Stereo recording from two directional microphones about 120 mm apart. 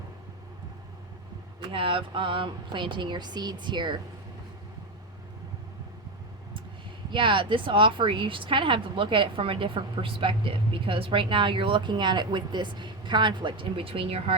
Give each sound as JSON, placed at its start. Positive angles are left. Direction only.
{"t": 1.7, "sound": "speech", "side_deg": -45}
{"t": 7.1, "sound": "speech", "side_deg": -45}